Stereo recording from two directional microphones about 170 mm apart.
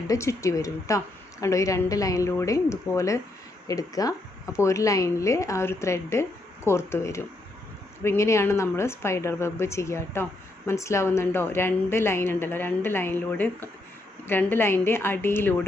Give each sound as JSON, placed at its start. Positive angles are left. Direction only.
{"t": 0.1, "sound": "a woman's voice", "side_deg": 15}